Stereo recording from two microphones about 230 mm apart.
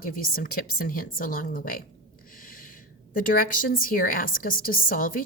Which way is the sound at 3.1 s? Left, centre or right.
Left.